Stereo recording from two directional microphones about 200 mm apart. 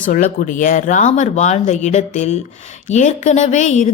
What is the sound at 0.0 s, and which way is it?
Speech, 40° left (ahead or behind).